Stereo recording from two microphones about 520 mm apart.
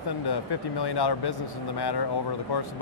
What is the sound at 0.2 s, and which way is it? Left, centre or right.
Speech, left.